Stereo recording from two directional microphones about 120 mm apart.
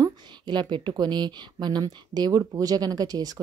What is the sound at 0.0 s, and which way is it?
A woman's voice, 40° right (ahead or behind).